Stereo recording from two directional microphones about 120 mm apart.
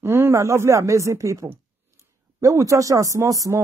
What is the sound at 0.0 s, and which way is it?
A man's voice, 20° right (ahead or behind).